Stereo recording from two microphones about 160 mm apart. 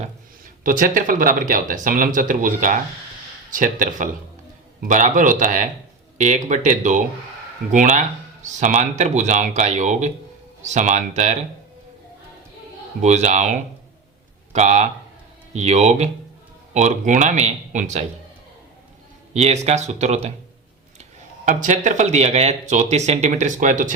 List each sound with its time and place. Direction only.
0.6 s speech: 60° right (ahead or behind)
13.0 s speech: 45° right (ahead or behind)
19.3 s speech: 45° right (ahead or behind)